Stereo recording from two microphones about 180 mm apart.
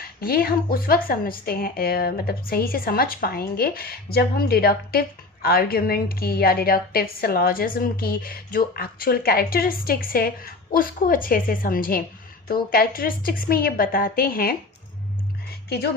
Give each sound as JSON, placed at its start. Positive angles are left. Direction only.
{"t": 0.2, "sound": "a woman's voice", "side_deg": 55}